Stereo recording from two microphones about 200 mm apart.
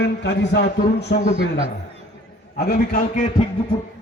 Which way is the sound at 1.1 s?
40° left (ahead or behind).